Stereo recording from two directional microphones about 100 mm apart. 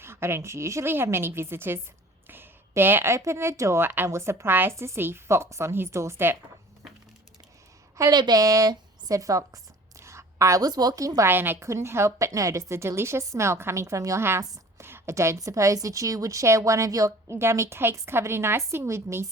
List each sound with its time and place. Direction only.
0.0 s a woman's voice: 25° right (ahead or behind)
8.1 s a woman's voice: 40° right (ahead or behind)
11.3 s a woman's voice: 20° right (ahead or behind)
14.4 s a sound: 35° right (ahead or behind)
14.8 s a woman's voice: 25° right (ahead or behind)